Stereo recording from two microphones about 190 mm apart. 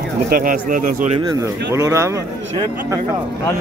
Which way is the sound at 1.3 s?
15° right (ahead or behind).